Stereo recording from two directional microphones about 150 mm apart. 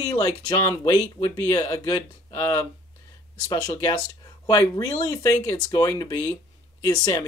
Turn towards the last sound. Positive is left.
turn(degrees=25)  # may be behind; listen again after turning